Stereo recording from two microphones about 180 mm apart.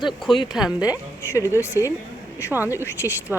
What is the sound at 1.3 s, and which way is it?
Speech, 15° left (ahead or behind).